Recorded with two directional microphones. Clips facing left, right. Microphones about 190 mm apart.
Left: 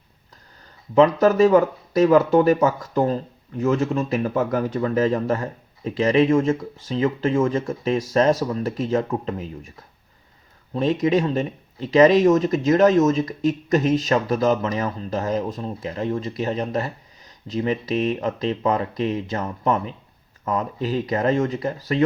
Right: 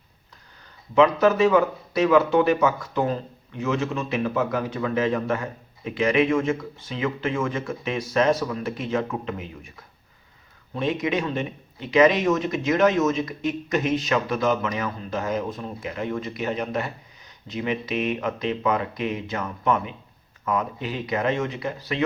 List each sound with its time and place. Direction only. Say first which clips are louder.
0.9 s speech: left 3 dB; 40° left (ahead or behind)
10.8 s speech: left 5 dB; 35° left (ahead or behind)